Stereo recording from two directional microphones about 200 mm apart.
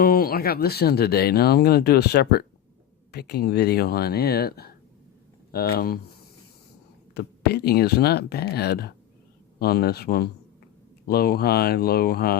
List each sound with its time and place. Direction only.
0.0 s speech: 50° left (ahead or behind)
7.1 s speech: 55° left (ahead or behind)